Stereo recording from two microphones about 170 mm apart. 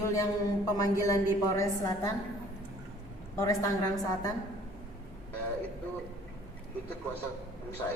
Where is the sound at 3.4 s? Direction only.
20° left (ahead or behind).